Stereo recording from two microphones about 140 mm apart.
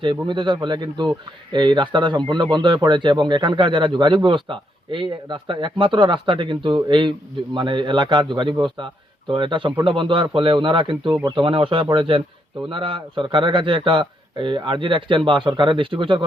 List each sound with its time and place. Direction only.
0.0 s a man's voice: 35° right (ahead or behind)